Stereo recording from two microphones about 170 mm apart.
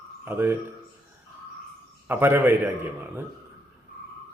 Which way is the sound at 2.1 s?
10° right (ahead or behind).